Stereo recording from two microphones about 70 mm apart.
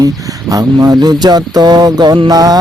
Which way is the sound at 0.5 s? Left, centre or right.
Right.